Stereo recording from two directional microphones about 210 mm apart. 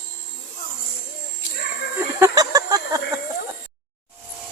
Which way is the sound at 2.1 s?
15° right (ahead or behind).